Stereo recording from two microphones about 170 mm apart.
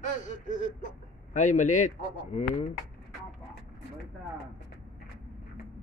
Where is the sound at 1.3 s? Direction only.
45° left (ahead or behind).